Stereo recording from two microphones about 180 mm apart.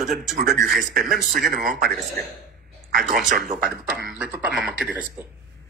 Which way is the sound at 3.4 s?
55° right (ahead or behind).